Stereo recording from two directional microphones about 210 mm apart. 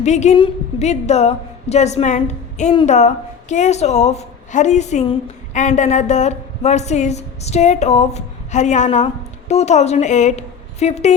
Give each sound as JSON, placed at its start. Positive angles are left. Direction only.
{"t": 0.0, "sound": "a woman's voice", "side_deg": 35}